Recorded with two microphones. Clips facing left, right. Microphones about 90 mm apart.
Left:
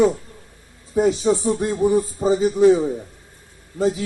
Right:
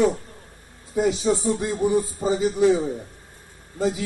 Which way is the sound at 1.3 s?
10° left (ahead or behind).